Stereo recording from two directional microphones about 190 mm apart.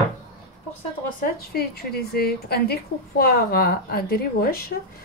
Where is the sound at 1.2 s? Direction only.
50° left (ahead or behind).